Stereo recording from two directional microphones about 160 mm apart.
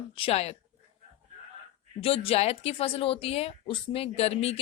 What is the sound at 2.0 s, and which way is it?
Speech, 35° left (ahead or behind).